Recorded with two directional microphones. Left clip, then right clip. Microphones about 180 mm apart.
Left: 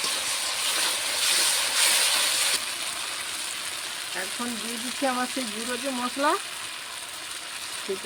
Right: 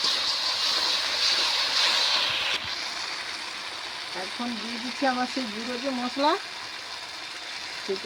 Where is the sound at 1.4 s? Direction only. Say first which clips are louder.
Even; 35° left (ahead or behind).